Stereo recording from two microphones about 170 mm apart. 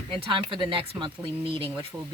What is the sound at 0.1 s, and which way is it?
Speech, 30° right (ahead or behind).